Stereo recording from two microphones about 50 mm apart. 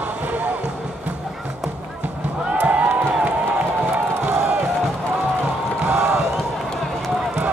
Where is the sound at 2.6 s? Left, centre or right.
Right.